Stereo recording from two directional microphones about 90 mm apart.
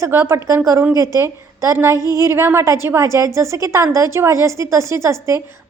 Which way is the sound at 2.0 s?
40° left (ahead or behind).